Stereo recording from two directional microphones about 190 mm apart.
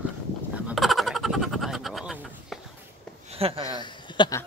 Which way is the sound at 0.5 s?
5° right (ahead or behind).